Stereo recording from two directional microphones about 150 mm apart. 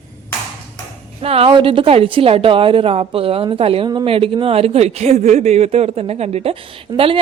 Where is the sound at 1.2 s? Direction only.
40° right (ahead or behind).